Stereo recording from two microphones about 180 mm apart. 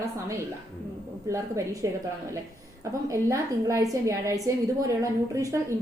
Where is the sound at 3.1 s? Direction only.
15° right (ahead or behind).